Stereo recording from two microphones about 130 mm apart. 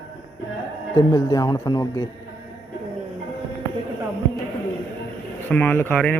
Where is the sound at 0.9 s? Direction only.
30° left (ahead or behind).